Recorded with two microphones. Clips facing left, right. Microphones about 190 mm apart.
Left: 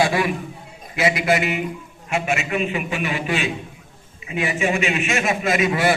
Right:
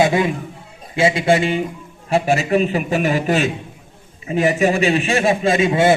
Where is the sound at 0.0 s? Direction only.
25° right (ahead or behind).